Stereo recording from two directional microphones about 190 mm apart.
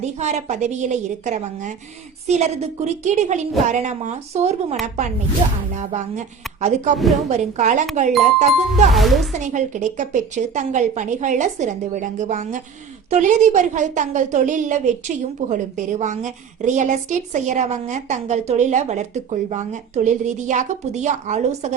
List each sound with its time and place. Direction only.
0.0 s a woman's voice: 35° right (ahead or behind)
8.9 s speech: centre (ahead or behind)
9.3 s a woman's voice: 40° right (ahead or behind)